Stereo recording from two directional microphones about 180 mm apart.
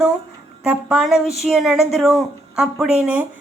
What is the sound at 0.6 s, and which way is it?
A woman's voice, 5° right (ahead or behind).